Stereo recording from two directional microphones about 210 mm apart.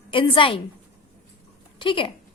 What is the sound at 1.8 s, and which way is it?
Speech, 25° left (ahead or behind).